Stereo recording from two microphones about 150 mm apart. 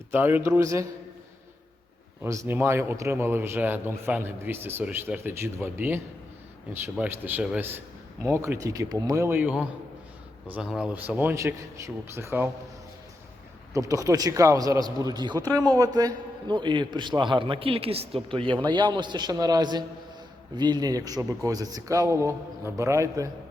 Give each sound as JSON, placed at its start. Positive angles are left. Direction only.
{"t": 0.1, "sound": "a man's voice", "side_deg": -15}
{"t": 2.2, "sound": "a man's voice", "side_deg": -20}
{"t": 13.7, "sound": "a man's voice", "side_deg": -20}